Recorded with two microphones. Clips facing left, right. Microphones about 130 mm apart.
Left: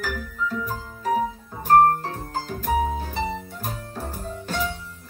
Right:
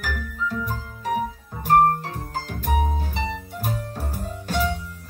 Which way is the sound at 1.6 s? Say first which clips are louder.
Left 1 dB; 40° left (ahead or behind).